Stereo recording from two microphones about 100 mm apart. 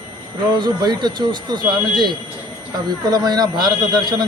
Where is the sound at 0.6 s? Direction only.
45° right (ahead or behind).